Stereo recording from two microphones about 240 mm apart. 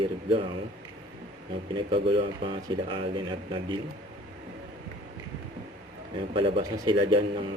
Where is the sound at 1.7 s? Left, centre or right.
Right.